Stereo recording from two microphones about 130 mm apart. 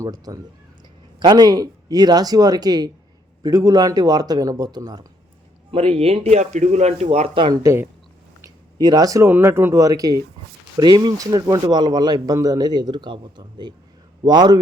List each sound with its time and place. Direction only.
0.0 s speech: 30° right (ahead or behind)
5.7 s speech: 45° right (ahead or behind)
7.5 s speech: 20° right (ahead or behind)